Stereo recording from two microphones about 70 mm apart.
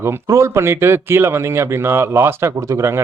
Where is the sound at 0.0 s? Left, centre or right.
Right.